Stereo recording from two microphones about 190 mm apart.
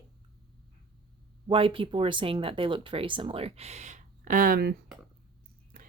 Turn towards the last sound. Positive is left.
turn(degrees=-45)  # may be behind; listen again after turning